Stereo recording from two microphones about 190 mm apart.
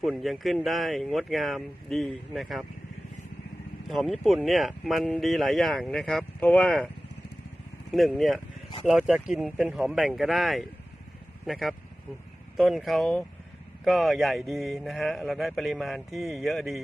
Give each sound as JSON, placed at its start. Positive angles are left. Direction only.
{"t": 0.0, "sound": "speech", "side_deg": 0}
{"t": 3.8, "sound": "speech", "side_deg": 0}
{"t": 7.9, "sound": "speech", "side_deg": 0}